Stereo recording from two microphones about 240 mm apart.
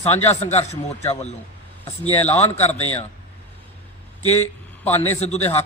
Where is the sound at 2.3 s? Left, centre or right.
Left.